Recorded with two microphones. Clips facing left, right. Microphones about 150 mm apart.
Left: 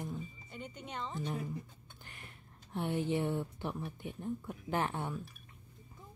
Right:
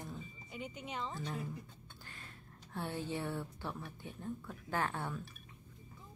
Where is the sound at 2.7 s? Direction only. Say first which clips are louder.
Left 6 dB; 20° left (ahead or behind).